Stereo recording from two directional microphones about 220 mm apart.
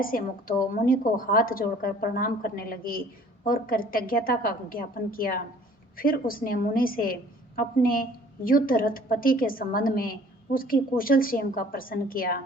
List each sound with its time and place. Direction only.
0.0 s a woman's voice: 40° left (ahead or behind)